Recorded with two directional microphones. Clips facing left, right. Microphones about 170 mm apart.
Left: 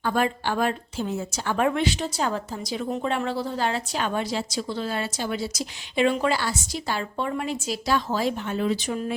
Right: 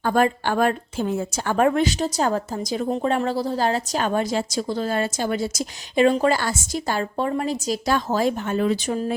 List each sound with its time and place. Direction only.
0.0 s a woman's voice: 45° right (ahead or behind)